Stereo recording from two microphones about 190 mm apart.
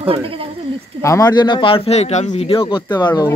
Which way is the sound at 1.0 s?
15° left (ahead or behind).